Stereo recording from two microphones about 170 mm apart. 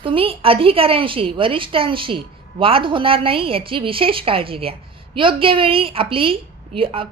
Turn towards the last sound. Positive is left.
turn(degrees=-30)  # may be behind; listen again after turning